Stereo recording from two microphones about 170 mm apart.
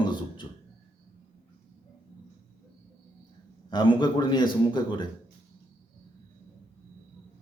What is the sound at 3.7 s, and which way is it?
A man's voice, 25° left (ahead or behind).